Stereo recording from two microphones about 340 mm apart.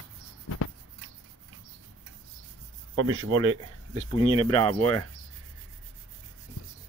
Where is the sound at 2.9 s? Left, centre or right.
Right.